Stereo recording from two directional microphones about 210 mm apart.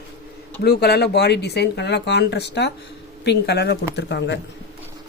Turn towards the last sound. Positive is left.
turn(degrees=55)  # may be behind; listen again after turning